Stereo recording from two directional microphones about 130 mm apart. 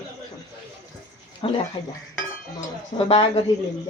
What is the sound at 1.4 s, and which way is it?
Speech, 45° left (ahead or behind).